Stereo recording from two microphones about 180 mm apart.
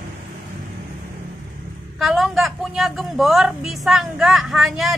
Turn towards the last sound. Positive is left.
turn(degrees=0)  # may be behind; listen again after turning